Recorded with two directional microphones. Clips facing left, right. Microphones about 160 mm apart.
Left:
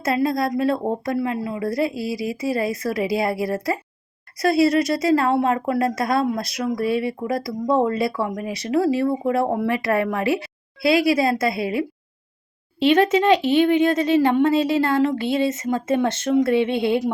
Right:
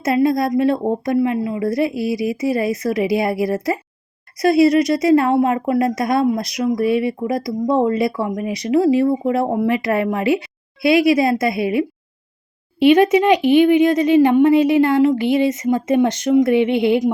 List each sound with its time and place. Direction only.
0.0 s speech: 20° right (ahead or behind)